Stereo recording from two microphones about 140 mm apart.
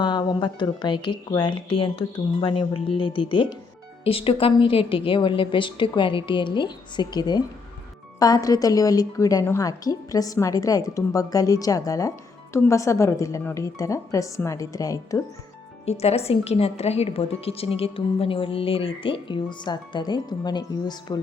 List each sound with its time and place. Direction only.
0.0 s a woman's voice: 30° left (ahead or behind)
15.9 s a woman's voice: 50° left (ahead or behind); by 21.2 s 30° left (ahead or behind)